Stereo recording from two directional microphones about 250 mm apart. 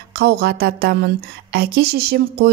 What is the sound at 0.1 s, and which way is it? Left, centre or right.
A woman's voice, right.